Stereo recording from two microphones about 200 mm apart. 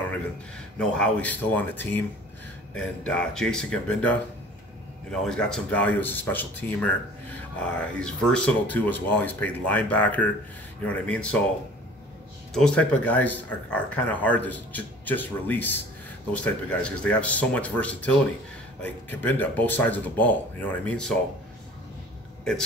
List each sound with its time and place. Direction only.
0.7 s speech: 5° left (ahead or behind)
8.0 s speech: 5° left (ahead or behind)
12.5 s speech: 5° left (ahead or behind)